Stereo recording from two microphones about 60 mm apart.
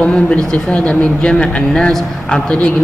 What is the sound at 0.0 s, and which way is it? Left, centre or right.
A man's voice, centre.